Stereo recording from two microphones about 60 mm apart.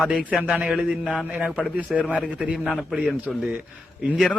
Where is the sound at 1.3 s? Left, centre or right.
Right.